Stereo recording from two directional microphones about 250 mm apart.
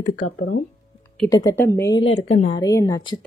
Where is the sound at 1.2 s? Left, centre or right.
Centre.